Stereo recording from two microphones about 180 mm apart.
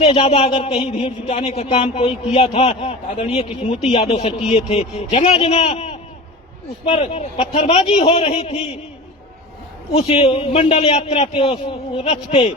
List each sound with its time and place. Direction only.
0.0 s a man's voice: 35° left (ahead or behind)
9.9 s a man's voice: 35° left (ahead or behind)